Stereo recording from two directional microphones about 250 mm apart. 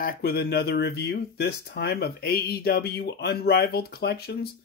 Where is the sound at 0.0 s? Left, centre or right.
Left.